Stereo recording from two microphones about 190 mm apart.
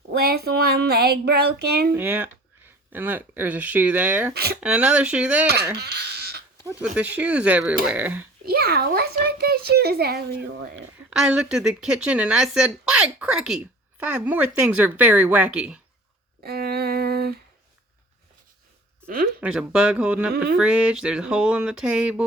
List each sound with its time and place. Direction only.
0.1 s child singing: 55° right (ahead or behind)
1.9 s speech: 10° right (ahead or behind)
5.7 s a sound: 55° right (ahead or behind)
6.9 s speech: 5° right (ahead or behind)
8.4 s a child's voice: 55° right (ahead or behind)
11.1 s speech: 5° right (ahead or behind)
16.4 s humming: 55° right (ahead or behind)
19.0 s speech: 50° right (ahead or behind)
19.4 s speech: 5° right (ahead or behind)